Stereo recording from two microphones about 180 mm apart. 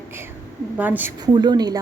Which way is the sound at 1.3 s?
25° right (ahead or behind).